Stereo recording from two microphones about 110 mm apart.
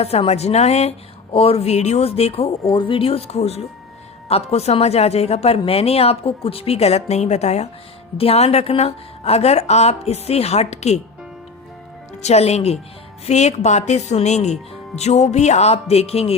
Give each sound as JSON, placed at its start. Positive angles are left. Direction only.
{"t": 0.0, "sound": "speech", "side_deg": 65}
{"t": 8.2, "sound": "speech", "side_deg": 65}
{"t": 12.2, "sound": "speech", "side_deg": 75}